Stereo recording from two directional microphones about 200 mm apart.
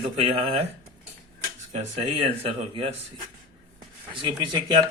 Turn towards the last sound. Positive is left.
turn(degrees=-25)  # may be behind; listen again after turning